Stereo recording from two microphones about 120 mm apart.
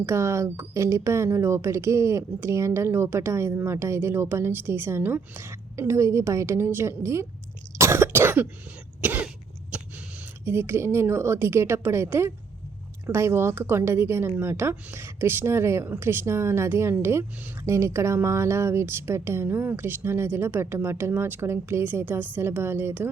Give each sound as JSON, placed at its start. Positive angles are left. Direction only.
{"t": 0.0, "sound": "a woman's voice", "side_deg": -20}
{"t": 7.8, "sound": "cough", "side_deg": -20}
{"t": 9.7, "sound": "a sound", "side_deg": -10}
{"t": 10.4, "sound": "a woman's voice", "side_deg": -20}